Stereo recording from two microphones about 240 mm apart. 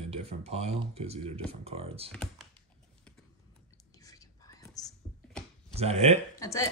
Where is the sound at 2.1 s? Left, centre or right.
Centre.